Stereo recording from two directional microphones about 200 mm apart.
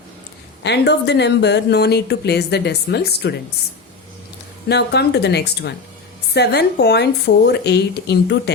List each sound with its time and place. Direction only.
0.6 s speech: 55° left (ahead or behind)
4.7 s speech: 55° left (ahead or behind)